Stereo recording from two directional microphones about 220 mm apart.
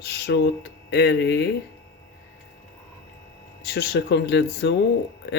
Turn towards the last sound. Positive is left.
turn(degrees=50)  # may be behind; listen again after turning